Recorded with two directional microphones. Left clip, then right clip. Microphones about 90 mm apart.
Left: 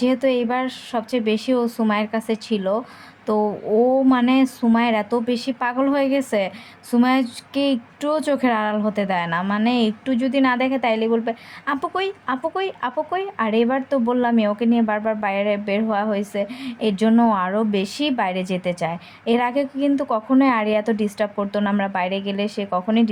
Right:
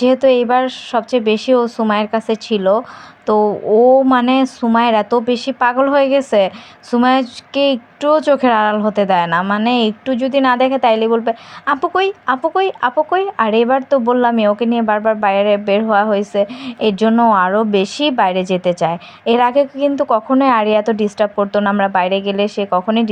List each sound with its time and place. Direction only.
0.0 s a woman's voice: 25° right (ahead or behind)